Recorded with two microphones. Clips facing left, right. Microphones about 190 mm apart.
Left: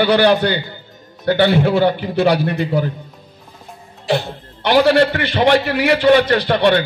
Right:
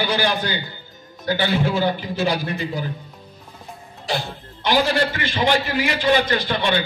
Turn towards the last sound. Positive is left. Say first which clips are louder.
# left 7 dB
turn(degrees=60)  # may be behind; listen again after turning